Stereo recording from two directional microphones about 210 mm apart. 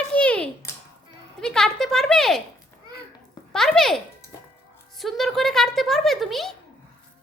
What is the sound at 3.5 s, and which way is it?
Speech, centre (ahead or behind).